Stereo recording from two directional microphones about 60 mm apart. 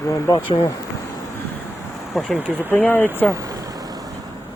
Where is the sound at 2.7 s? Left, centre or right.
Left.